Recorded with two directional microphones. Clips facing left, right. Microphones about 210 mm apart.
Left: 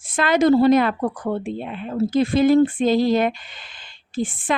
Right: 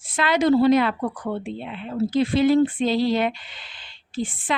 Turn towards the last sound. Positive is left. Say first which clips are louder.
# left 3 dB
turn(degrees=50)  # may be behind; listen again after turning